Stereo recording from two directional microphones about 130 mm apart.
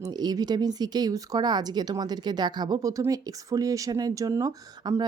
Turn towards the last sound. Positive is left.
turn(degrees=-30)  # may be behind; listen again after turning